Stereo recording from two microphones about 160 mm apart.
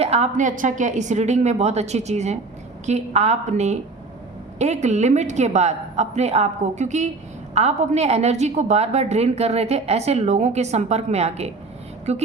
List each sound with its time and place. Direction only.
0.0 s a woman's voice: 40° right (ahead or behind)